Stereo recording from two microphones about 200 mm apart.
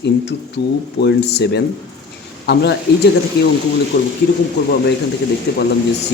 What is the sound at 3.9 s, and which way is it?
Speech, 50° left (ahead or behind).